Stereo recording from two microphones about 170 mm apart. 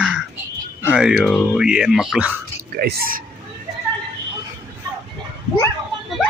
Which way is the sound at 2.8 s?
65° right (ahead or behind).